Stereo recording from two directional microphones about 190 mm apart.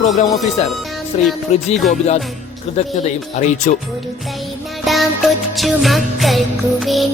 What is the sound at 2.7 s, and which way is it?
A man's voice, 35° left (ahead or behind).